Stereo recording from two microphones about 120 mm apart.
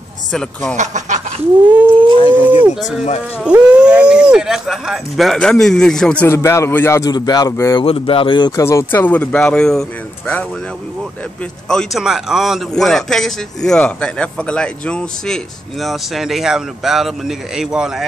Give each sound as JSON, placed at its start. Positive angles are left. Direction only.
{"t": 0.3, "sound": "a man's voice", "side_deg": 5}
{"t": 0.7, "sound": "a sound", "side_deg": -90}
{"t": 2.1, "sound": "speech", "side_deg": 50}
{"t": 3.4, "sound": "a man's voice", "side_deg": -10}
{"t": 6.2, "sound": "speech", "side_deg": 20}
{"t": 7.1, "sound": "a man's voice", "side_deg": 35}
{"t": 7.8, "sound": "speech", "side_deg": 50}
{"t": 11.7, "sound": "a man's voice", "side_deg": 5}